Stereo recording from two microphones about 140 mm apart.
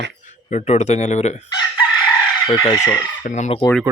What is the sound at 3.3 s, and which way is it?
Speech, 55° left (ahead or behind).